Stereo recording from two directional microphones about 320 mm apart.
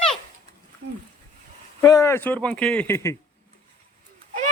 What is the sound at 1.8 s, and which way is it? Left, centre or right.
Speech, centre.